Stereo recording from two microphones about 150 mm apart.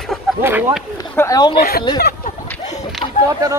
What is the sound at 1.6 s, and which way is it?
Speech, 90° left.